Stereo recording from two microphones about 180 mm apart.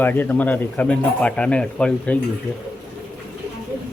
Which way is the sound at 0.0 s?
10° left (ahead or behind).